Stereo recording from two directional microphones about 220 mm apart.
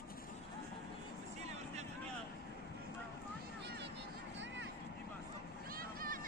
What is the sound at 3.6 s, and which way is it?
Vehicle, 50° right (ahead or behind).